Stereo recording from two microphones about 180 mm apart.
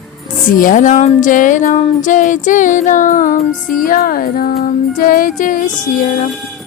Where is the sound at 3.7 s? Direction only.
50° left (ahead or behind).